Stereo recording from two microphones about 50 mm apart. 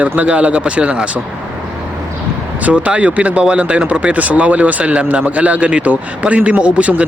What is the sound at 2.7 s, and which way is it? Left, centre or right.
Speech, right.